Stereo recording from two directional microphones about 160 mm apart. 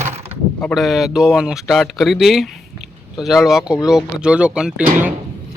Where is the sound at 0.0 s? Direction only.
40° right (ahead or behind).